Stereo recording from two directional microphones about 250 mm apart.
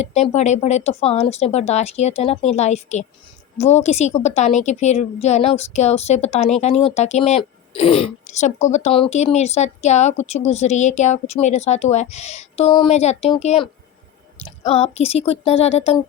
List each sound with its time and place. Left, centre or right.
0.0 s a woman's voice: left